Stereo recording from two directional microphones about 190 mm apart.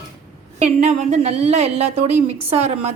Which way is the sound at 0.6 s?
35° right (ahead or behind).